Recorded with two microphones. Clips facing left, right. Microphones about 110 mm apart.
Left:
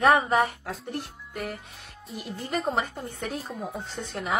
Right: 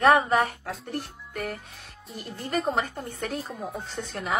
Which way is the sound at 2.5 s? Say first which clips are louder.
Right 1 dB; 5° left (ahead or behind).